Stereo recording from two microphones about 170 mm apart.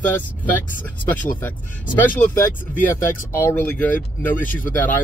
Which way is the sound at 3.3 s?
15° left (ahead or behind).